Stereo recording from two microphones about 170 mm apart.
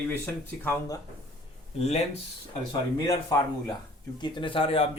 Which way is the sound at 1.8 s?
40° left (ahead or behind).